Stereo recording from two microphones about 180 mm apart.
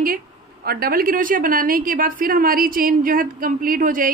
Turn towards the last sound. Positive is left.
turn(degrees=-50)  # may be behind; listen again after turning